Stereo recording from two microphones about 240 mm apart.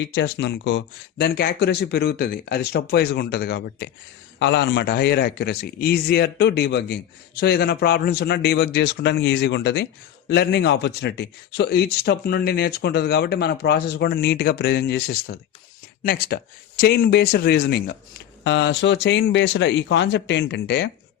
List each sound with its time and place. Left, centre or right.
0.0 s speech: left